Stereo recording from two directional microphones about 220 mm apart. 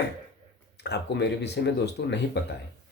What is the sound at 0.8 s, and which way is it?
Speech, 50° left (ahead or behind).